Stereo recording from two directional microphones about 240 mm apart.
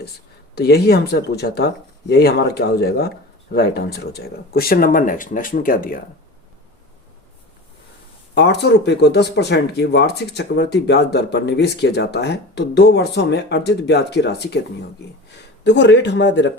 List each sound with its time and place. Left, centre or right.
0.5 s speech: left
8.4 s speech: left
15.6 s speech: left